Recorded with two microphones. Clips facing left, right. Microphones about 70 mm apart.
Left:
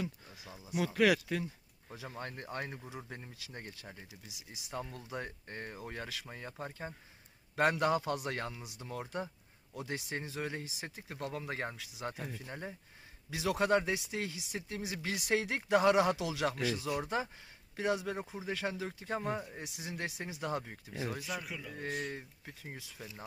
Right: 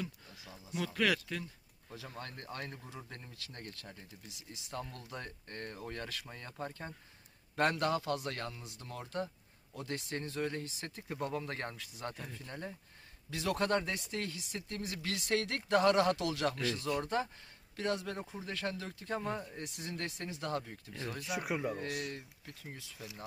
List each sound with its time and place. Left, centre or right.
0.0 s a sound: centre
1.9 s speech: centre
21.3 s speech: right
21.8 s speech: right
22.1 s speech: left